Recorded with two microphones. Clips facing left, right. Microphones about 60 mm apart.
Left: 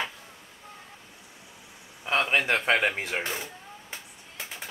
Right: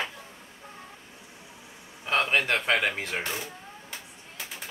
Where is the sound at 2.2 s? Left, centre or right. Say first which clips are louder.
Left 2 dB; centre.